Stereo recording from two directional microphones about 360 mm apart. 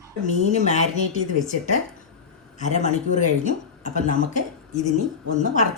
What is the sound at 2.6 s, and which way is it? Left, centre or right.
Speech, centre.